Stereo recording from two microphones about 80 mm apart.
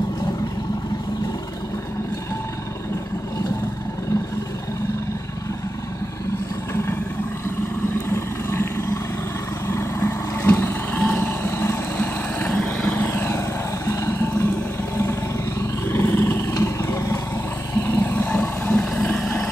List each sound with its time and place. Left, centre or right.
8.1 s vehicle: left
12.4 s vehicle: centre
13.1 s vehicle: left
13.8 s music: left
15.9 s vehicle: left
17.8 s roar: left
18.6 s a sound: centre